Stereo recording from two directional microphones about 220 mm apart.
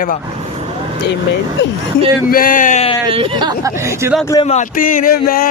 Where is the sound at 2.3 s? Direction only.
40° left (ahead or behind).